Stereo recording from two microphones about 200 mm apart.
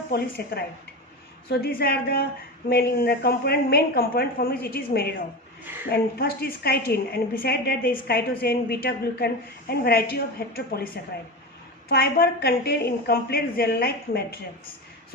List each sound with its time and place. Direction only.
0.1 s a woman's voice: 50° left (ahead or behind)
11.9 s a woman's voice: 50° left (ahead or behind)